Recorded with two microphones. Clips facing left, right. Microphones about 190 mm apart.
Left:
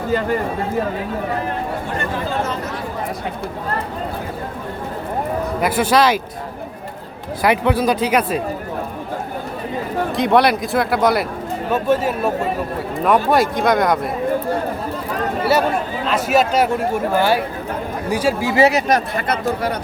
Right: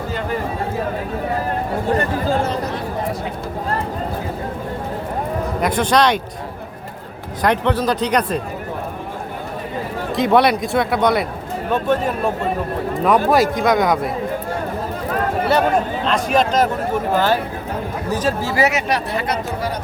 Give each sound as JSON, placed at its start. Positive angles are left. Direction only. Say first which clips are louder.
{"t": 5.5, "sound": "speech", "louder": "left 1 dB", "side_deg": 5}
{"t": 7.4, "sound": "speech", "louder": "left 1 dB", "side_deg": 10}
{"t": 10.2, "sound": "speech", "louder": "right 1 dB", "side_deg": 0}
{"t": 16.0, "sound": "speech", "louder": "left 4 dB", "side_deg": 5}
{"t": 18.5, "sound": "speech", "louder": "left 5 dB", "side_deg": 30}
{"t": 18.9, "sound": "speech", "louder": "left 2 dB", "side_deg": 50}